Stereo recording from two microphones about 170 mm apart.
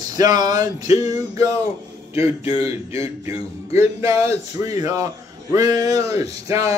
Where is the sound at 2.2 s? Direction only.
35° left (ahead or behind).